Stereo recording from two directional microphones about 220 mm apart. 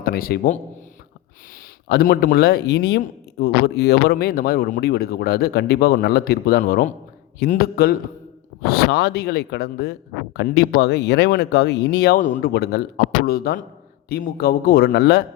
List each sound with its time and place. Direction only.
0.0 s a man's voice: 40° left (ahead or behind)
1.9 s speech: 45° left (ahead or behind)